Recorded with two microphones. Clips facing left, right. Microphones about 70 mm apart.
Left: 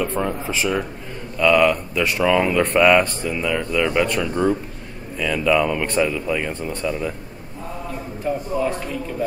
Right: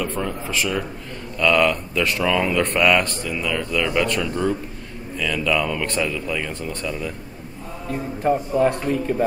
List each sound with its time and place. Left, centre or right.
0.0 s speech: centre
1.4 s speech: centre
7.9 s a man's voice: right